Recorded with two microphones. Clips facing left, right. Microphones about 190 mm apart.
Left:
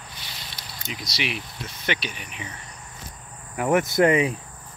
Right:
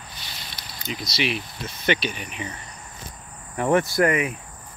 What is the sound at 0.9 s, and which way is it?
Speech, 15° left (ahead or behind).